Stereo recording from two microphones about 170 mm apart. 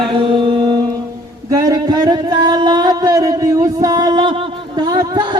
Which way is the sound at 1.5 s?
20° right (ahead or behind).